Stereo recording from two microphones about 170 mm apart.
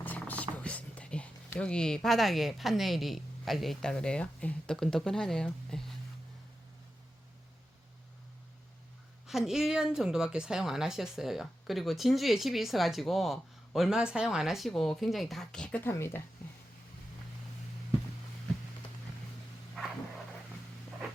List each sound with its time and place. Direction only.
0.0 s music: 10° left (ahead or behind)
0.5 s speech: 10° left (ahead or behind)
9.2 s speech: centre (ahead or behind); by 16.2 s 15° left (ahead or behind)